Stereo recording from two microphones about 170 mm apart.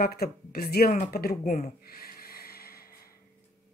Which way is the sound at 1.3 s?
45° left (ahead or behind).